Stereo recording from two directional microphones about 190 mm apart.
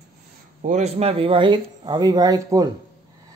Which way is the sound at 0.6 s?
40° right (ahead or behind).